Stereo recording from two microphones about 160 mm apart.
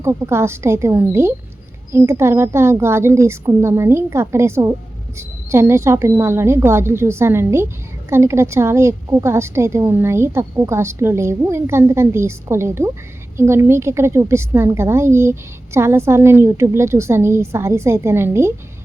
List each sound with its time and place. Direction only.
0.0 s a woman's voice: 15° right (ahead or behind)